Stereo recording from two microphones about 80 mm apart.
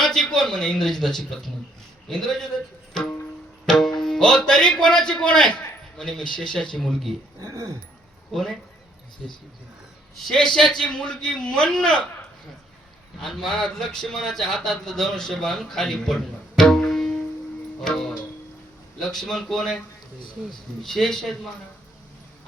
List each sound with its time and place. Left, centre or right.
0.0 s a man's voice: centre
3.7 s music: centre
4.0 s a man's voice: centre
7.3 s speech: right
8.3 s a man's voice: centre
13.2 s speech: centre
20.8 s speech: centre